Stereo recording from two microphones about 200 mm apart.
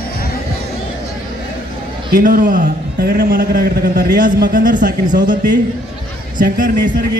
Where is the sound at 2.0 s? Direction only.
40° right (ahead or behind).